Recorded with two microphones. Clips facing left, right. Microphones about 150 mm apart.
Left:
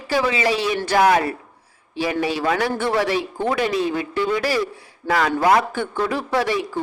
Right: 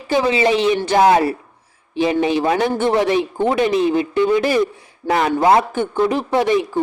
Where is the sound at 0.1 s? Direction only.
25° right (ahead or behind).